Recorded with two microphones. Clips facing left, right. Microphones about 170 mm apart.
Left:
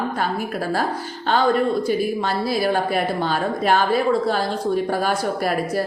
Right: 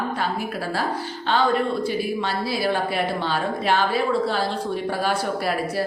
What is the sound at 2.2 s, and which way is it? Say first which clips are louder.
A woman's voice: left 3 dB; 45° left (ahead or behind).